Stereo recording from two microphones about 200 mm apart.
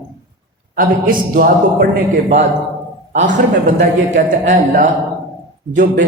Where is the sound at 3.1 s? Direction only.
35° right (ahead or behind).